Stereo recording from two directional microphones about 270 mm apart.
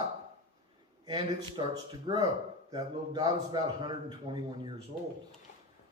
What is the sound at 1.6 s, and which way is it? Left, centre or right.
Speech, centre.